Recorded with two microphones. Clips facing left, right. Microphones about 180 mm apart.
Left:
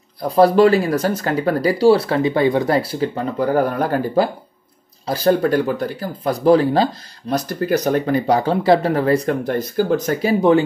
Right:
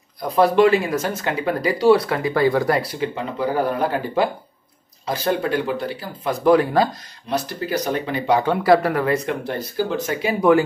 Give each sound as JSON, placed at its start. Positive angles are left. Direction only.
{"t": 0.4, "sound": "speech", "side_deg": 35}
{"t": 3.2, "sound": "speech", "side_deg": 45}
{"t": 7.2, "sound": "speech", "side_deg": 45}
{"t": 9.5, "sound": "speech", "side_deg": 45}